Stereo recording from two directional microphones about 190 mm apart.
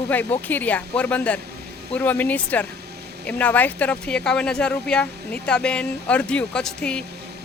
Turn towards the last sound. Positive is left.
turn(degrees=5)  # may be behind; listen again after turning